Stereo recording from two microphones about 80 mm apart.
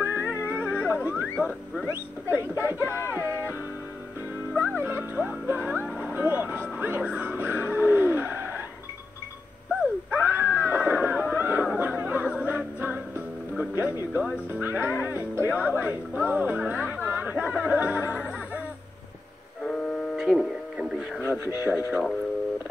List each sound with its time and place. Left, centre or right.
0.0 s music: right
0.5 s cat: right
1.0 s a sound: right
1.9 s speech: right
4.6 s music: right
10.1 s cat: right
11.6 s music: centre
19.6 s music: centre
20.2 s radio: centre
21.6 s speech: centre